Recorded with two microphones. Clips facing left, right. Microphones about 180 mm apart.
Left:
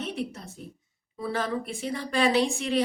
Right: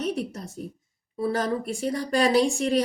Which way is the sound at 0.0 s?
40° right (ahead or behind).